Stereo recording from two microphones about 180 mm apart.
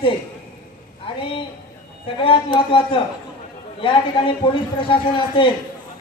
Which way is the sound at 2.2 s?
30° left (ahead or behind).